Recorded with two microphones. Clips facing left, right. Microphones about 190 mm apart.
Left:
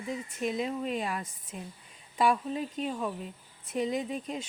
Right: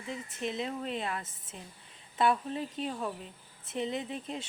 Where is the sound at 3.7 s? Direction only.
25° right (ahead or behind).